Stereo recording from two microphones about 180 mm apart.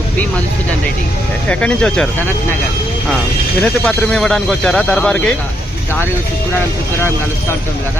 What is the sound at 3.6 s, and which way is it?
Speech, 5° left (ahead or behind).